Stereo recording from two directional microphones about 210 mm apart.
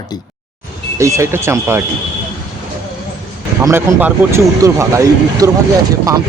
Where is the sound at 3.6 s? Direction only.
10° right (ahead or behind).